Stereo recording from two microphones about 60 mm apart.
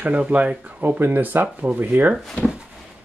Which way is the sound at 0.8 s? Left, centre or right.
Right.